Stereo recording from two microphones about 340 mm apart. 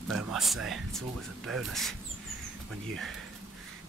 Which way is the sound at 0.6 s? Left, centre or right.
Centre.